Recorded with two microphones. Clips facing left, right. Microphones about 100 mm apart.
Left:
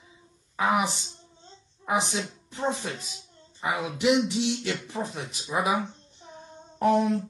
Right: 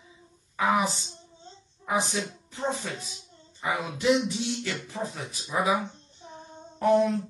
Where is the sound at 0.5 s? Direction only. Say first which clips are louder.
Even; 20° left (ahead or behind).